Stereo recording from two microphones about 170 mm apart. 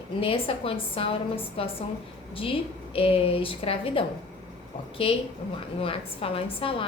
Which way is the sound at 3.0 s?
35° left (ahead or behind).